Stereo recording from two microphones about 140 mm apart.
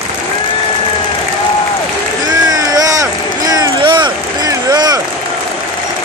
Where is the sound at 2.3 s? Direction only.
25° right (ahead or behind).